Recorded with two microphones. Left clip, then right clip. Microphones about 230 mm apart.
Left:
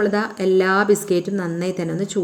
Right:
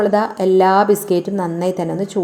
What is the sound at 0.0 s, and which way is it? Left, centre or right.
A woman's voice, centre.